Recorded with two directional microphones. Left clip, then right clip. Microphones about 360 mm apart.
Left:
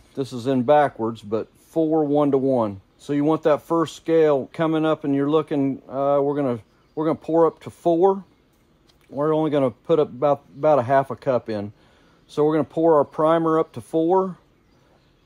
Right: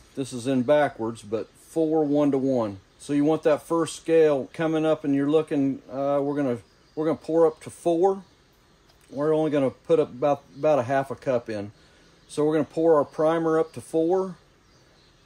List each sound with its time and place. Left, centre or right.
0.1 s speech: centre
1.7 s speech: left
2.1 s speech: centre